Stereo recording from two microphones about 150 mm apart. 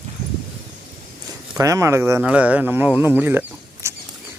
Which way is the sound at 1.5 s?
20° right (ahead or behind).